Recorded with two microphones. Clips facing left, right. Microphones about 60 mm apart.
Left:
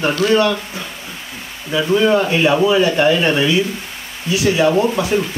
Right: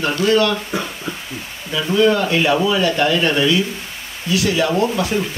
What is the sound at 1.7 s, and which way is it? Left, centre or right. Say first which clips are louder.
Speech: left 2 dB; centre.